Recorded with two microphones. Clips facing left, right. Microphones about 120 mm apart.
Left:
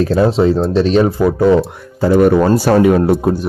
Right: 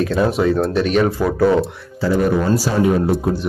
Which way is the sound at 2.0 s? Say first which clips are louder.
Left 7 dB; 65° left (ahead or behind).